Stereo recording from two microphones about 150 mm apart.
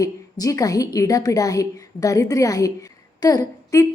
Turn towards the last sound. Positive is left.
turn(degrees=20)  # may be behind; listen again after turning